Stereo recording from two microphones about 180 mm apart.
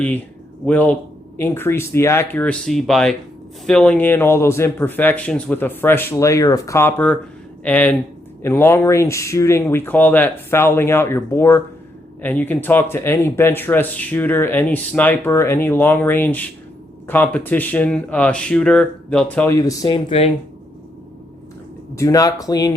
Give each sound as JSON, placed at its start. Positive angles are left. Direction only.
{"t": 0.6, "sound": "speech", "side_deg": 10}
{"t": 19.5, "sound": "speech", "side_deg": 20}
{"t": 21.9, "sound": "speech", "side_deg": 20}